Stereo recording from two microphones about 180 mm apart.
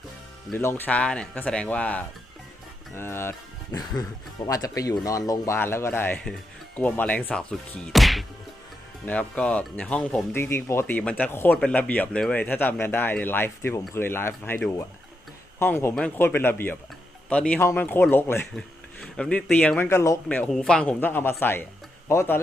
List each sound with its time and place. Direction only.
0.5 s speech: 10° left (ahead or behind)